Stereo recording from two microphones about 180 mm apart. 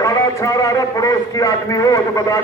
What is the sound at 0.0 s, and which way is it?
A man's voice, 20° left (ahead or behind).